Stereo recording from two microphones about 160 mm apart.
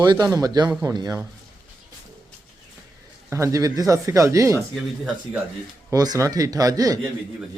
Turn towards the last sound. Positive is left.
turn(degrees=-20)  # may be behind; listen again after turning